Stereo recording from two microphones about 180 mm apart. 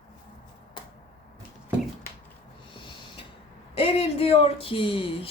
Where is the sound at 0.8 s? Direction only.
25° left (ahead or behind).